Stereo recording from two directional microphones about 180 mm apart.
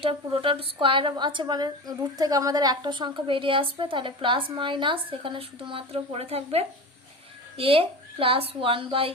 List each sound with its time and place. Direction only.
0.0 s a woman's voice: 30° right (ahead or behind)